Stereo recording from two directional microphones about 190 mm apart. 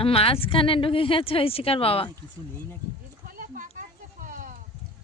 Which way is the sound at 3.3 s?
45° right (ahead or behind).